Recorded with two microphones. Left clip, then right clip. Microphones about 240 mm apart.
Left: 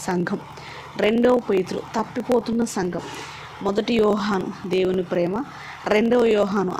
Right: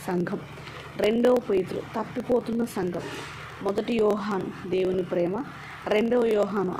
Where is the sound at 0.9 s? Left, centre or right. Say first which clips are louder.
Left 3 dB; left.